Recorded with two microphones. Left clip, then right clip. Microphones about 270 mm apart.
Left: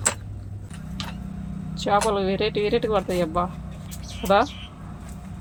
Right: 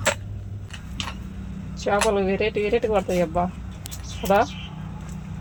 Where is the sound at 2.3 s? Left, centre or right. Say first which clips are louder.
Right 1 dB; right.